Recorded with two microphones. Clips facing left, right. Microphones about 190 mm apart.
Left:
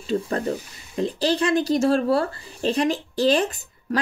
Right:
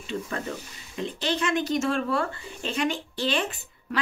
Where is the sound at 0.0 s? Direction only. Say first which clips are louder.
Left 8 dB; 35° left (ahead or behind).